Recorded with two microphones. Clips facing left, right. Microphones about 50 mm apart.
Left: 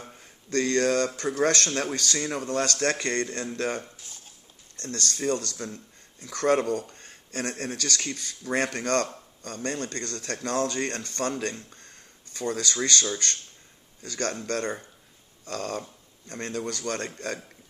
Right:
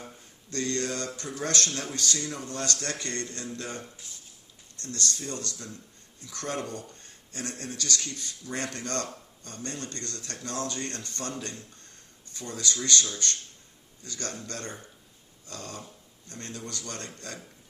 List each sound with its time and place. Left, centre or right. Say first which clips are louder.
0.5 s speech: left 8 dB; left
15.4 s speech: left 9 dB; left